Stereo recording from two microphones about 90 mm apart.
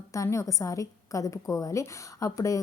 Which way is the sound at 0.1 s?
35° left (ahead or behind).